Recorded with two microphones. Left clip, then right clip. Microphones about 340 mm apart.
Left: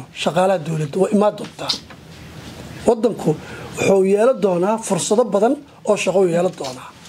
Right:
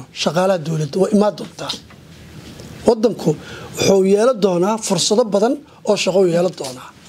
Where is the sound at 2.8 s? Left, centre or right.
Right.